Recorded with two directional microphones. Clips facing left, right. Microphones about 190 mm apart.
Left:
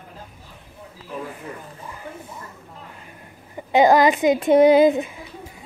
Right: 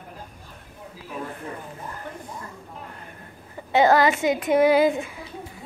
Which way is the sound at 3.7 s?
15° left (ahead or behind).